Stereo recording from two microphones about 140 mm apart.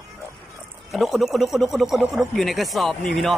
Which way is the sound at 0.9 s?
Centre (ahead or behind).